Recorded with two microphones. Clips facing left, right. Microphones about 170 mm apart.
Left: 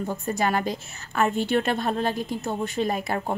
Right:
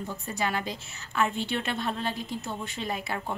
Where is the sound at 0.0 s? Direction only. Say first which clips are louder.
Left 6 dB; 45° left (ahead or behind).